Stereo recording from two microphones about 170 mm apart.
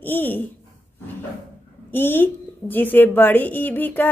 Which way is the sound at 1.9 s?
10° left (ahead or behind).